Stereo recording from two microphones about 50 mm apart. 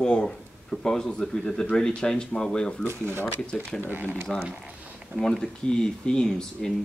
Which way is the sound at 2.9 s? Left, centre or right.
Right.